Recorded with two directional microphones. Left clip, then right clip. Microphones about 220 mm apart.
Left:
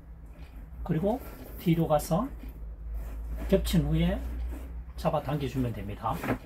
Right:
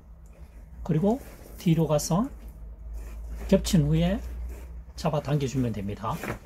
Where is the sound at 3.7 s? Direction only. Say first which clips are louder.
Right 4 dB; 50° right (ahead or behind).